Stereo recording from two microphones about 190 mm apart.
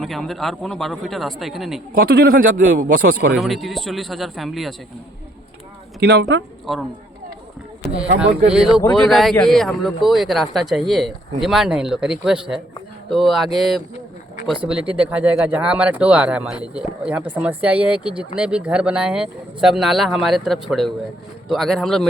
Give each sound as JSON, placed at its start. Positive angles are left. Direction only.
{"t": 0.0, "sound": "a man's voice", "side_deg": 0}
{"t": 2.0, "sound": "speech", "side_deg": -55}
{"t": 3.3, "sound": "a man's voice", "side_deg": 0}
{"t": 6.0, "sound": "speech", "side_deg": -60}
{"t": 6.7, "sound": "a man's voice", "side_deg": 0}
{"t": 7.8, "sound": "a man's voice", "side_deg": 0}